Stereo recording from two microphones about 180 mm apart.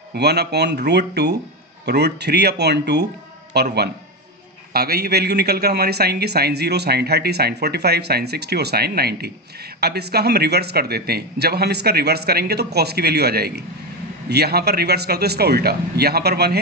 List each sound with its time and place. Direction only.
0.1 s speech: 65° right (ahead or behind)
4.7 s a man's voice: 60° right (ahead or behind)